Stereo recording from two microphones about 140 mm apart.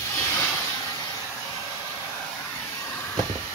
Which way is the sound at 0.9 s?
30° left (ahead or behind).